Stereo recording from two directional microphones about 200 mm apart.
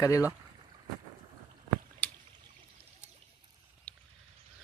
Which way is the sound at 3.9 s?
5° left (ahead or behind).